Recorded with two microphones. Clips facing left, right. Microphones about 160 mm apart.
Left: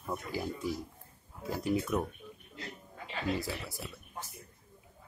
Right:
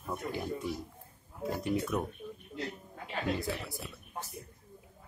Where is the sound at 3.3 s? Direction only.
Centre (ahead or behind).